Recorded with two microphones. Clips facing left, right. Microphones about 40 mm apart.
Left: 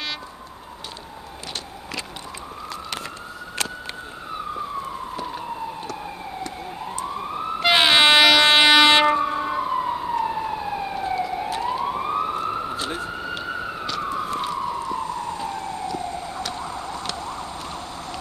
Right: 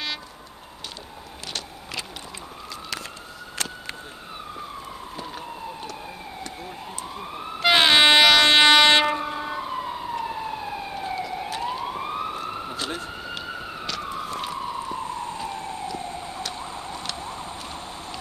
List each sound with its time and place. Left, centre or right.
7.6 s train: centre
9.1 s emergency vehicle: left
11.2 s police car: left
11.7 s emergency vehicle: centre
12.1 s emergency vehicle: left
14.5 s emergency vehicle: left
15.3 s emergency vehicle: left
16.0 s emergency vehicle: right
16.3 s emergency vehicle: left